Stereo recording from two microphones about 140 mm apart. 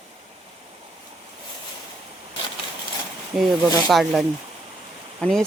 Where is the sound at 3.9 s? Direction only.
Centre (ahead or behind).